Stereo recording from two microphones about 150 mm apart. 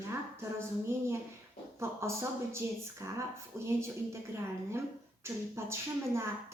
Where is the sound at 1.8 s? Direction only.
20° right (ahead or behind).